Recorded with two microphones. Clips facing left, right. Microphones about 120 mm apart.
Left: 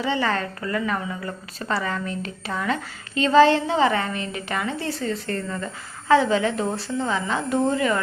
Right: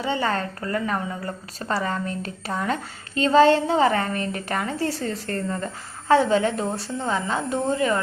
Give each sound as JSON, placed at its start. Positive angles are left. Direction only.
{"t": 0.0, "sound": "a woman's voice", "side_deg": -30}